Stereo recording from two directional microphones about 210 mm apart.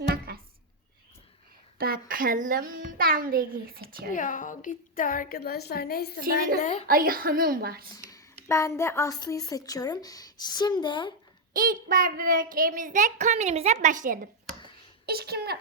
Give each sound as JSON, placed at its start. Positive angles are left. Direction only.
{"t": 0.3, "sound": "a sound", "side_deg": -50}
{"t": 1.8, "sound": "a child's voice", "side_deg": -45}
{"t": 4.1, "sound": "a woman's voice", "side_deg": 40}
{"t": 6.6, "sound": "a woman's voice", "side_deg": 35}
{"t": 6.8, "sound": "a child's voice", "side_deg": -45}
{"t": 7.9, "sound": "a sound", "side_deg": 15}
{"t": 8.4, "sound": "a woman's voice", "side_deg": 15}
{"t": 11.5, "sound": "a child's voice", "side_deg": -40}